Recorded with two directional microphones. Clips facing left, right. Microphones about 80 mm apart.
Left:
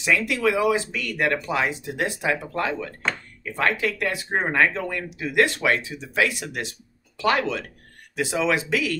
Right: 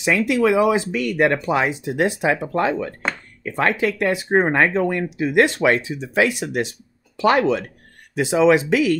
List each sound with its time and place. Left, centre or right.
0.0 s speech: right